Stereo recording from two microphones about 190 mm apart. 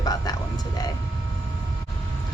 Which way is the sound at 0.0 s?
20° left (ahead or behind).